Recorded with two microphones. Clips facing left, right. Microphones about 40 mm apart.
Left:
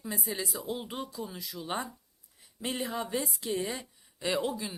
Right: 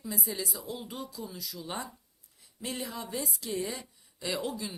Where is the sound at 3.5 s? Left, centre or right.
Centre.